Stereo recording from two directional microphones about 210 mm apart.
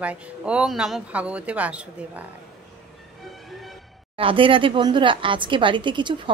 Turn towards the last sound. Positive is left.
turn(degrees=-20)  # may be behind; listen again after turning